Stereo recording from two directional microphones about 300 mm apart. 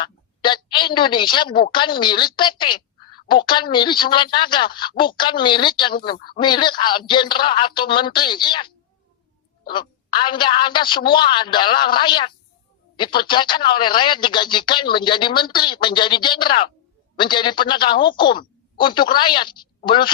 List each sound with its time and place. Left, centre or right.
0.0 s a woman's voice: centre